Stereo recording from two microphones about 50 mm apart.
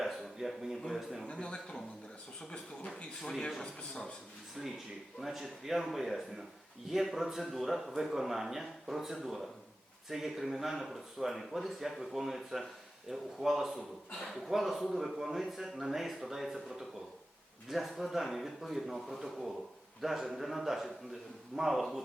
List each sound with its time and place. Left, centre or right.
0.0 s a sound: centre
1.2 s speech: centre
3.2 s speech: centre
4.6 s a man's voice: centre